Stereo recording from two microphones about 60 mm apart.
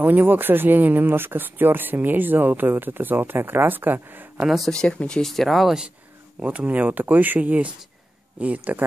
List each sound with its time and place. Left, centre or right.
0.0 s speech: right
4.6 s speech: centre
6.4 s speech: right